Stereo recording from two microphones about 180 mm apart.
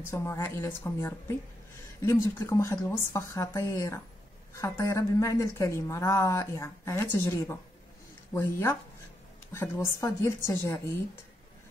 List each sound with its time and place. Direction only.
0.0 s a woman's voice: 15° left (ahead or behind)
2.3 s a woman's voice: 15° left (ahead or behind)